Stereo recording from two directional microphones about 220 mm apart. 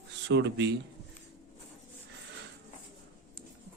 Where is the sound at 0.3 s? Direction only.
55° right (ahead or behind).